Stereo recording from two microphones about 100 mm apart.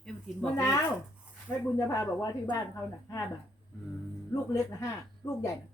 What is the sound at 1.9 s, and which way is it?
Speech, 35° left (ahead or behind).